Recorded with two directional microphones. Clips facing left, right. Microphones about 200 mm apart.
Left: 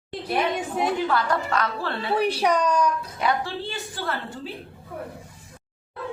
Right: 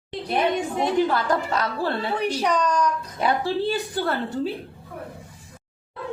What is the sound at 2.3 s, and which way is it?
Speech, 10° left (ahead or behind).